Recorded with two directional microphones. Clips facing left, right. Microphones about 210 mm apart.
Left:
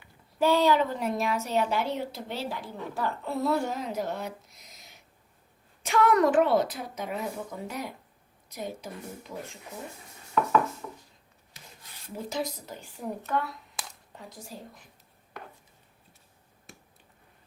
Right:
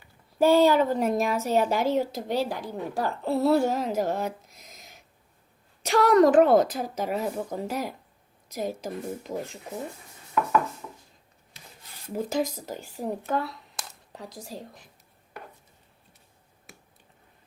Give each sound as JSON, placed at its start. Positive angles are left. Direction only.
{"t": 0.0, "sound": "a woman's voice", "side_deg": -45}
{"t": 5.8, "sound": "a child's voice", "side_deg": -35}
{"t": 12.1, "sound": "speech", "side_deg": -45}
{"t": 13.0, "sound": "a child's voice", "side_deg": -35}